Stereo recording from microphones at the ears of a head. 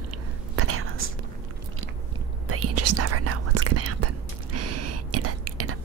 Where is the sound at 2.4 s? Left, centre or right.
Right.